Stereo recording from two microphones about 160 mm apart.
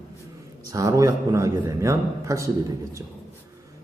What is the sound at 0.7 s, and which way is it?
Speech, 20° right (ahead or behind).